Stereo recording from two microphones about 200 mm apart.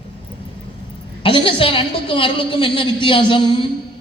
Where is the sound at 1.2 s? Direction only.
25° left (ahead or behind).